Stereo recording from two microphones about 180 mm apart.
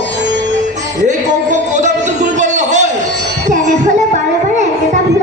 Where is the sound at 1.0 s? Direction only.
40° right (ahead or behind).